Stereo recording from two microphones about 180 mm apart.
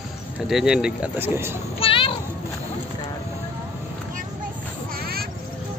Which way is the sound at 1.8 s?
30° left (ahead or behind).